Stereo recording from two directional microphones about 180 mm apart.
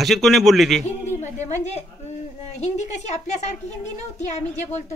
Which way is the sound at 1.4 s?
40° left (ahead or behind).